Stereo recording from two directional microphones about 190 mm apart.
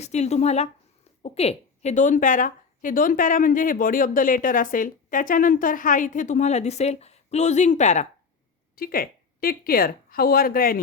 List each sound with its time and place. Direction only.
0.0 s a woman's voice: 35° left (ahead or behind)
8.7 s a woman's voice: 50° left (ahead or behind)